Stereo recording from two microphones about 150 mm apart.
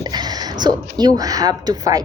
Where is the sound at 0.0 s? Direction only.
25° right (ahead or behind).